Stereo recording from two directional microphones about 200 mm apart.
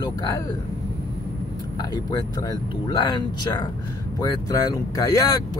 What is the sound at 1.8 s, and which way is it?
Speech, 20° left (ahead or behind).